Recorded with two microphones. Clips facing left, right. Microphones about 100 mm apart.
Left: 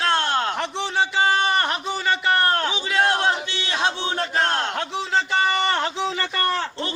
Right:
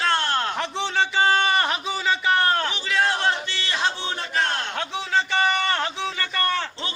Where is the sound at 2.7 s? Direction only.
15° left (ahead or behind).